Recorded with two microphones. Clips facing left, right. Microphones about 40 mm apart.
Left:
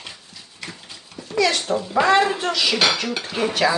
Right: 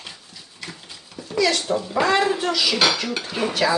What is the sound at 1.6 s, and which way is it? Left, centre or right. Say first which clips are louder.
Speech: left 2 dB; centre.